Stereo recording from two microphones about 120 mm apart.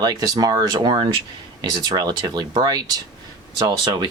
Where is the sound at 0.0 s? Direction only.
35° right (ahead or behind).